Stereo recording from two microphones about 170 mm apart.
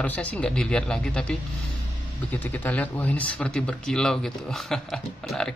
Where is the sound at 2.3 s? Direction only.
10° left (ahead or behind).